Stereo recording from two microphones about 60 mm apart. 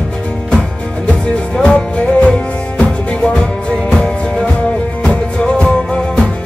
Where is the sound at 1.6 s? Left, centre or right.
Centre.